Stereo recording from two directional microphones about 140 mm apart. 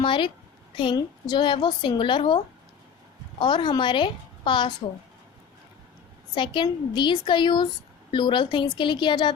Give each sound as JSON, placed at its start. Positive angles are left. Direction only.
{"t": 0.0, "sound": "a woman's voice", "side_deg": 35}
{"t": 6.3, "sound": "a woman's voice", "side_deg": 35}